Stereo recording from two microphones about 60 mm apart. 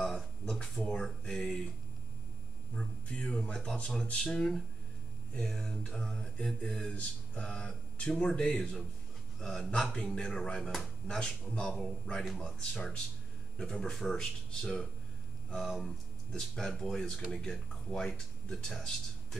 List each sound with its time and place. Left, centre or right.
0.0 s a sound: centre
2.7 s speech: centre
9.7 s speech: centre
12.3 s speech: centre
15.5 s speech: centre